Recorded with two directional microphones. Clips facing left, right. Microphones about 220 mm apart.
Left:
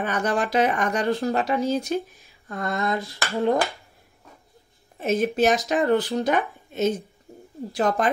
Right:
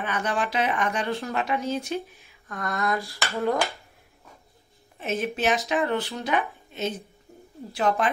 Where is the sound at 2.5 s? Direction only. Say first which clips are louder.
Left 2 dB; 25° left (ahead or behind).